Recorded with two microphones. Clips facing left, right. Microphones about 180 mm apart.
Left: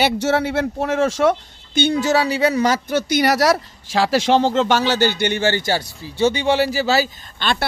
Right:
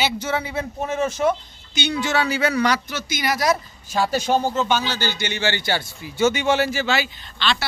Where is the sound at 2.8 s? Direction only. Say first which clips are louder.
Left 9 dB; 60° left (ahead or behind).